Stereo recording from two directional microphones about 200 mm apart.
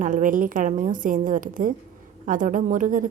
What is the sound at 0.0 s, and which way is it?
A woman's voice, 40° right (ahead or behind).